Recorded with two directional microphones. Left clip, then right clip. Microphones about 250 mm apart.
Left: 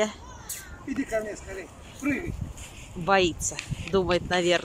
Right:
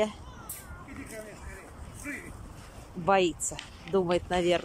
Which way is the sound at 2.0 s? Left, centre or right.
Left.